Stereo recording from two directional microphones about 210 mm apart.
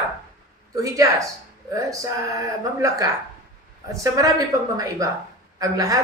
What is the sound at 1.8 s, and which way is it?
Speech, 15° right (ahead or behind).